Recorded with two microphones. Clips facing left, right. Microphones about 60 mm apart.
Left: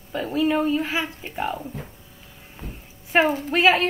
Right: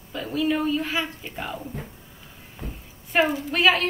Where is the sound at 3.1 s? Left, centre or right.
Left.